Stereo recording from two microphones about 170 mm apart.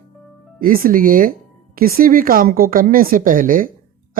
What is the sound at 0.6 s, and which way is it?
Speech, 55° right (ahead or behind).